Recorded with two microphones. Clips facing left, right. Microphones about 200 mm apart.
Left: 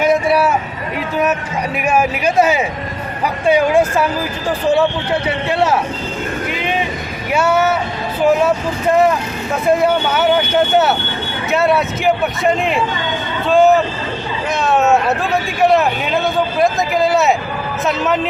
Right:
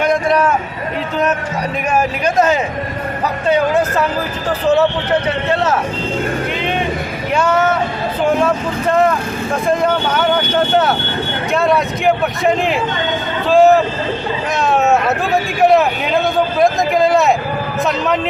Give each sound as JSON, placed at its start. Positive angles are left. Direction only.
{"t": 0.0, "sound": "a sound", "side_deg": 5}
{"t": 1.9, "sound": "speech", "side_deg": 10}
{"t": 5.5, "sound": "speech", "side_deg": 10}